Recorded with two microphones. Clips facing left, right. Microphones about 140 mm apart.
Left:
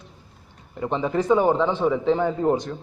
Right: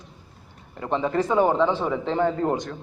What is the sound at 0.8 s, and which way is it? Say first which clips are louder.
A man's voice: even; 10° left (ahead or behind).